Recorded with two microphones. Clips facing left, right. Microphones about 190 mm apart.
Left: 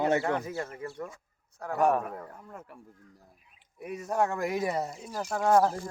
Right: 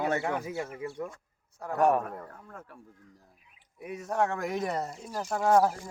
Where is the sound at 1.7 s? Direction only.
5° left (ahead or behind).